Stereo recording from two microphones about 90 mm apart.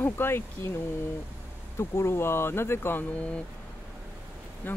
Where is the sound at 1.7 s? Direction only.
30° left (ahead or behind).